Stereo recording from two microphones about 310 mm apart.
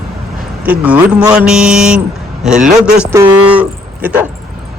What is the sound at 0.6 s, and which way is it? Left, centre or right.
Speech, centre.